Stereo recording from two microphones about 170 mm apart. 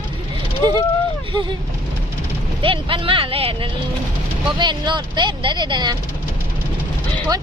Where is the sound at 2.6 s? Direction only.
30° right (ahead or behind).